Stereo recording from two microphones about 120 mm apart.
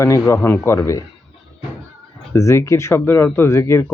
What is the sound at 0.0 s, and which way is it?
Speech, 25° left (ahead or behind).